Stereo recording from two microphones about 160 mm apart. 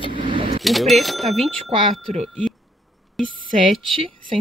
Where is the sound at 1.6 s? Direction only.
35° right (ahead or behind).